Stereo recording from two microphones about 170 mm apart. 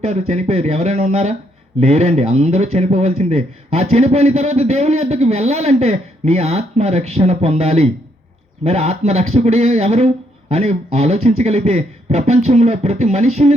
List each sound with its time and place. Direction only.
0.0 s speech: 40° right (ahead or behind)